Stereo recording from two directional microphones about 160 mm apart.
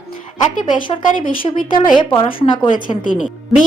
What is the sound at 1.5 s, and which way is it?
A woman's voice, 30° left (ahead or behind).